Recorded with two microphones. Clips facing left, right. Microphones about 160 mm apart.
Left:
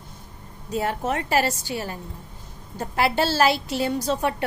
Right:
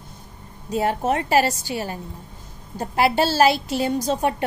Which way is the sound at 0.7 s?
25° right (ahead or behind).